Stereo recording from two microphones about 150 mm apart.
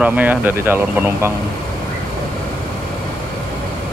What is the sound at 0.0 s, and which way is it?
Speech, 10° right (ahead or behind).